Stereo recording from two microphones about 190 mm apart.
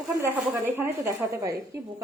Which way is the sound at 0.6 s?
15° right (ahead or behind).